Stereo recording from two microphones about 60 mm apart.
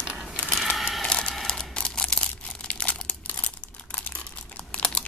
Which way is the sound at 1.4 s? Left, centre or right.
Centre.